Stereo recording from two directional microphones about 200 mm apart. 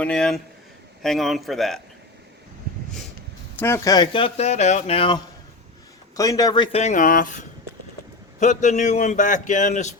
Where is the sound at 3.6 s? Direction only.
15° left (ahead or behind).